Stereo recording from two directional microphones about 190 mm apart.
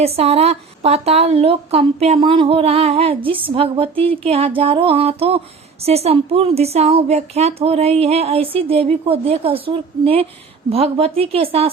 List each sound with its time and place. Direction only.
0.0 s a woman's voice: 35° right (ahead or behind)